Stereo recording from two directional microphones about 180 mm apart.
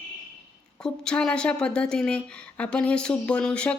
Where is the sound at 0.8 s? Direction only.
5° left (ahead or behind).